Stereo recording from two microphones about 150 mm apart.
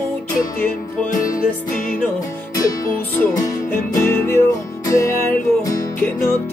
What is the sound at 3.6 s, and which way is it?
Music, 15° left (ahead or behind).